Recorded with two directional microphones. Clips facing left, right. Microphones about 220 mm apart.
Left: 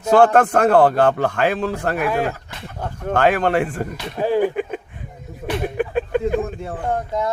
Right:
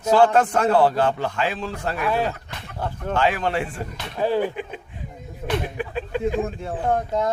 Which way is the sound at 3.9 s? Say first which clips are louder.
Left 1 dB; 15° left (ahead or behind).